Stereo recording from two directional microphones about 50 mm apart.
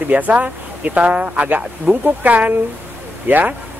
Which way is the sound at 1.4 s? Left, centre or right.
Right.